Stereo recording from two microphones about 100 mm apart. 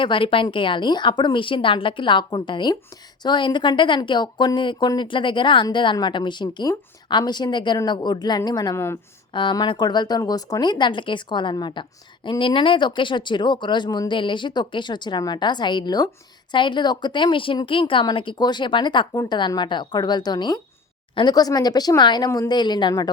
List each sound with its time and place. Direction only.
0.0 s speech: 60° left (ahead or behind); by 8.7 s 40° left (ahead or behind)
8.7 s speech: 25° left (ahead or behind)
9.3 s speech: 50° left (ahead or behind)
19.1 s speech: 35° left (ahead or behind)
19.4 s speech: 50° left (ahead or behind)